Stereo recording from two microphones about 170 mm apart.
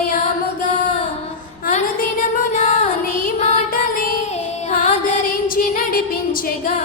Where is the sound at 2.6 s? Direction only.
50° left (ahead or behind).